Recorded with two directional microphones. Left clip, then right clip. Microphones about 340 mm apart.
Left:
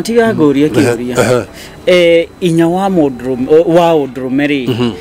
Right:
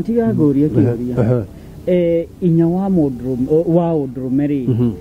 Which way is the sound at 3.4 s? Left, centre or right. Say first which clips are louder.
Left 8 dB; left.